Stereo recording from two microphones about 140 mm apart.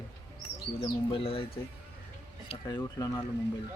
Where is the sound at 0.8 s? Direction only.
40° left (ahead or behind).